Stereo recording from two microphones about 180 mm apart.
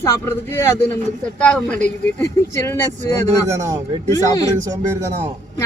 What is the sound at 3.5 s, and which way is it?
Speech, 15° right (ahead or behind).